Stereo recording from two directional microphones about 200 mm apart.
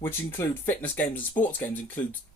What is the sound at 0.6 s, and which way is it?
Speech, 10° left (ahead or behind).